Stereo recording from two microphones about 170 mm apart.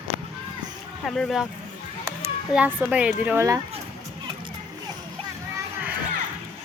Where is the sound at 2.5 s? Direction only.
5° right (ahead or behind).